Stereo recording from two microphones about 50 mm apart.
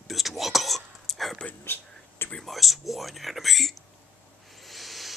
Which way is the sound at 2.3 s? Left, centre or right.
Centre.